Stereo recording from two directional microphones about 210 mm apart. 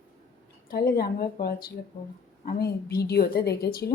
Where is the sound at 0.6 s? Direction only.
45° left (ahead or behind).